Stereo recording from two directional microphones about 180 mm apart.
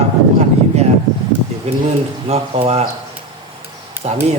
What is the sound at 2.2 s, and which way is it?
Speech, 35° right (ahead or behind).